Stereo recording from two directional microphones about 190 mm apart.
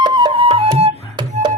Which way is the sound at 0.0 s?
25° right (ahead or behind).